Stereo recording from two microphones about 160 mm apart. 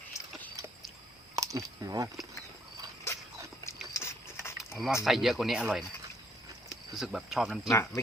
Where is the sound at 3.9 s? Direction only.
15° left (ahead or behind).